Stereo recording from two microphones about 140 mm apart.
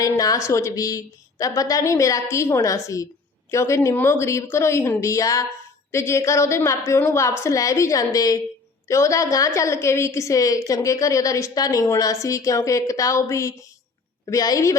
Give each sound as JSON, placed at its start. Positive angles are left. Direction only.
{"t": 0.0, "sound": "a woman's voice", "side_deg": 25}